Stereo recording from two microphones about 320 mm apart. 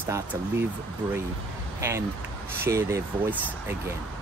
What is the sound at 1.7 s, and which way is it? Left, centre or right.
Speech, centre.